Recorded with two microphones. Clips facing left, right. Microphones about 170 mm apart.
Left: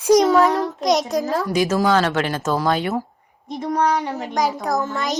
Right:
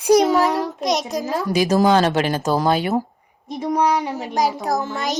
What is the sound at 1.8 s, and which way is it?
Speech, 20° right (ahead or behind).